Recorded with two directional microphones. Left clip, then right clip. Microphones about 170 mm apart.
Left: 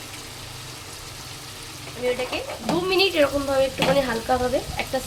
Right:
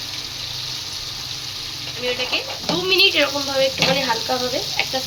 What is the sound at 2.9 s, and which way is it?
Speech, 55° left (ahead or behind).